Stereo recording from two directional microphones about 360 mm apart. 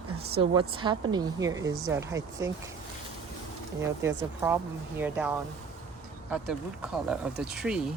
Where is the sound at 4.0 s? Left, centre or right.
Centre.